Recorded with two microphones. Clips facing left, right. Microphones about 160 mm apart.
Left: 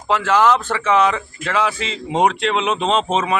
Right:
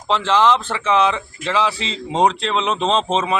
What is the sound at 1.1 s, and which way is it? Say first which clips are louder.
Speech: even; 25° right (ahead or behind).